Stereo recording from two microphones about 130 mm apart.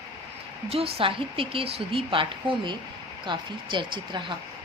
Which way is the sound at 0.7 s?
45° right (ahead or behind).